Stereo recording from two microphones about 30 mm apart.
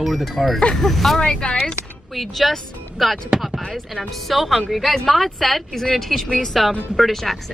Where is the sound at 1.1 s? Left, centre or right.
Left.